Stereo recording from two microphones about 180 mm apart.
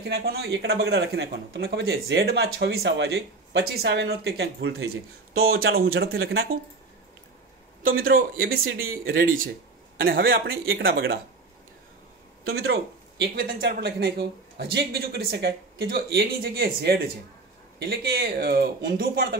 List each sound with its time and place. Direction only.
0.0 s a man's voice: 60° right (ahead or behind)
5.4 s a man's voice: 60° right (ahead or behind); by 6.5 s 75° right (ahead or behind)
7.8 s a man's voice: 50° right (ahead or behind)
12.5 s a man's voice: 65° right (ahead or behind)